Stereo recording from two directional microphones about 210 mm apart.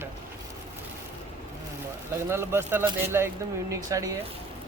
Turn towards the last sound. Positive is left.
turn(degrees=-15)  # may be behind; listen again after turning